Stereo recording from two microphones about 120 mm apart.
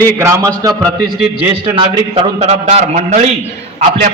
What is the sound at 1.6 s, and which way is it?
Speech, 50° right (ahead or behind).